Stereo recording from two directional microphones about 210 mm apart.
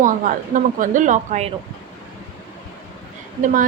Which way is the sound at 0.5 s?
35° right (ahead or behind).